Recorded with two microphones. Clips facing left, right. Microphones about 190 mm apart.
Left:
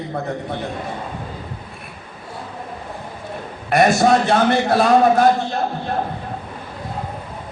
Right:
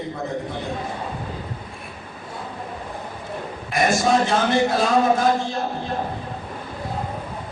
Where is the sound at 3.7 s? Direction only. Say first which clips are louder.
Left 5 dB; 60° left (ahead or behind).